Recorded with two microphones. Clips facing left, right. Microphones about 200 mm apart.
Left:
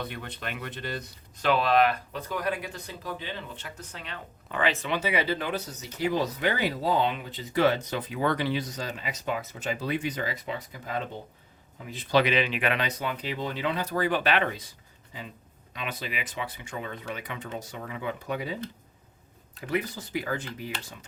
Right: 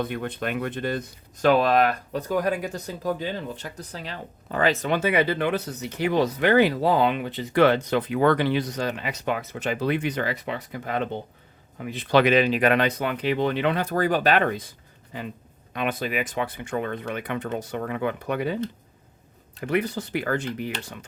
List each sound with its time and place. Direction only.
0.0 s a man's voice: 50° right (ahead or behind); by 12.2 s 65° right (ahead or behind)
12.2 s speech: 45° right (ahead or behind); by 14.0 s 60° right (ahead or behind)
14.0 s speech: 40° right (ahead or behind)
15.7 s speech: 55° right (ahead or behind)
19.6 s speech: 65° right (ahead or behind)